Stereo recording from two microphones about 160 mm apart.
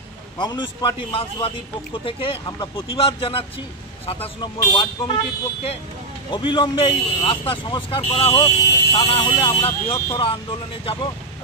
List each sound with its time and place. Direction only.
0.4 s a man's voice: 25° left (ahead or behind)
6.3 s speech: 30° left (ahead or behind)